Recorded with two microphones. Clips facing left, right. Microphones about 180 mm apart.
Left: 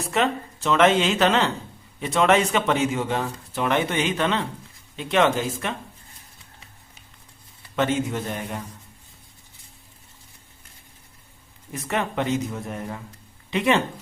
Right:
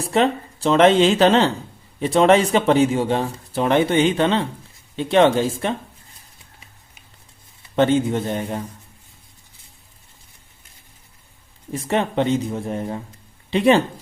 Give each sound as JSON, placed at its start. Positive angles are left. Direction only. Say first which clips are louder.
{"t": 0.1, "sound": "speech", "louder": "right 5 dB", "side_deg": -30}
{"t": 7.8, "sound": "speech", "louder": "right 6 dB", "side_deg": -30}
{"t": 11.7, "sound": "speech", "louder": "right 5 dB", "side_deg": -30}